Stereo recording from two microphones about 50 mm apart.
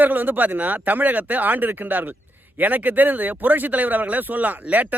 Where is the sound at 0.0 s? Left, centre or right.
Right.